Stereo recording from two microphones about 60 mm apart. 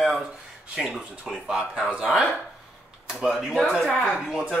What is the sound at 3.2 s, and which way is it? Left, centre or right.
Speech, centre.